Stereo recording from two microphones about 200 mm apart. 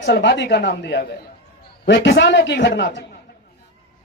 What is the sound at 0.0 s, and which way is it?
A man's voice, 60° left (ahead or behind).